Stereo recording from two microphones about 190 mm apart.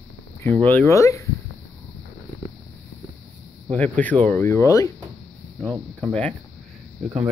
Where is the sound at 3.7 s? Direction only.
5° left (ahead or behind).